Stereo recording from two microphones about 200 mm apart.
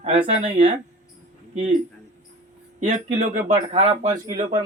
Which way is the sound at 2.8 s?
35° right (ahead or behind).